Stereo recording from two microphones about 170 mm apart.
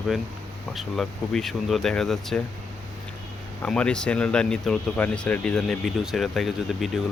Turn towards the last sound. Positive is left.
turn(degrees=0)  # may be behind; listen again after turning